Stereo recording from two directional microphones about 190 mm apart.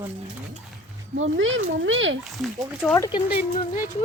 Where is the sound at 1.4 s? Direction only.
90° right.